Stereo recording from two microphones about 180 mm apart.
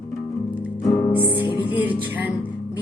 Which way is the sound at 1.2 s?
25° left (ahead or behind).